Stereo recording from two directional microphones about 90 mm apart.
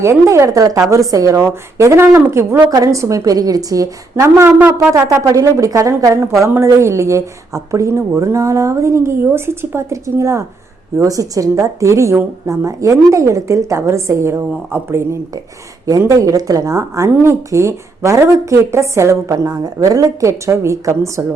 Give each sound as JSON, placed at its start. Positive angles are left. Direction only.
{"t": 0.0, "sound": "a woman's voice", "side_deg": -30}
{"t": 2.6, "sound": "a woman's voice", "side_deg": -40}
{"t": 4.1, "sound": "a woman's voice", "side_deg": -30}
{"t": 4.9, "sound": "a woman's voice", "side_deg": -35}